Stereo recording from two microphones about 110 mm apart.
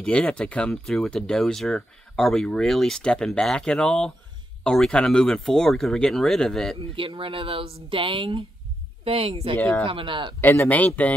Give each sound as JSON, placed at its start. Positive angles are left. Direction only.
{"t": 0.0, "sound": "speech", "side_deg": 10}
{"t": 6.8, "sound": "speech", "side_deg": -55}
{"t": 10.4, "sound": "speech", "side_deg": 20}